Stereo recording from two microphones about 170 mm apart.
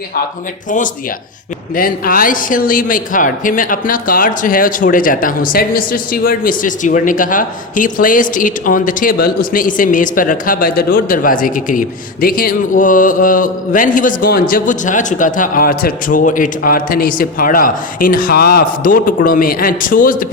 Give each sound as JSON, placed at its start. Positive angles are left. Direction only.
{"t": 1.7, "sound": "speech", "side_deg": 55}